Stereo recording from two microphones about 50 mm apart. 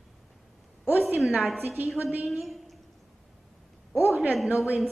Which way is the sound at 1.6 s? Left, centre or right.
Right.